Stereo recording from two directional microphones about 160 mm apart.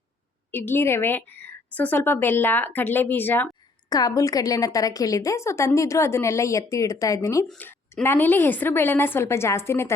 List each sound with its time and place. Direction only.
0.5 s a woman's voice: 15° left (ahead or behind)
3.8 s a woman's voice: 25° left (ahead or behind)
7.4 s a woman's voice: 5° left (ahead or behind)